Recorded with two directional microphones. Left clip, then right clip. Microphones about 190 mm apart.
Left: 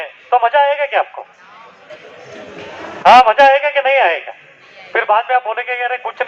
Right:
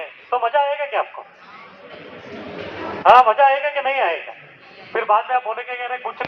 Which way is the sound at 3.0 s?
30° left (ahead or behind).